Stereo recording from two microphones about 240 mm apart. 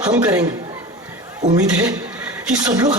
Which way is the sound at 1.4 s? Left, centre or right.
Right.